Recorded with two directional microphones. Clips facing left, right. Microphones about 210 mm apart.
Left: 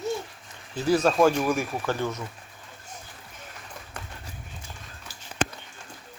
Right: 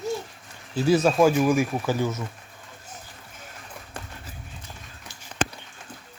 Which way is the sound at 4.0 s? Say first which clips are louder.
Right 3 dB; 30° right (ahead or behind).